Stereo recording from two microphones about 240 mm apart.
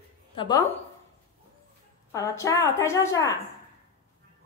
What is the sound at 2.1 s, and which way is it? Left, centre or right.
A woman's voice, centre.